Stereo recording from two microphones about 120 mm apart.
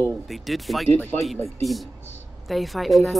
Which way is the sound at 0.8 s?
15° left (ahead or behind).